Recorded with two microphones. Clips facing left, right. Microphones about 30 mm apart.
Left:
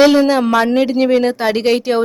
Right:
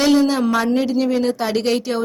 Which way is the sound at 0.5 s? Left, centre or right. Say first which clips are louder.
Left 4 dB; left.